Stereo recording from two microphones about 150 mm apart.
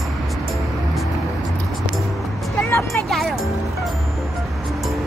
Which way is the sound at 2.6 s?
20° left (ahead or behind).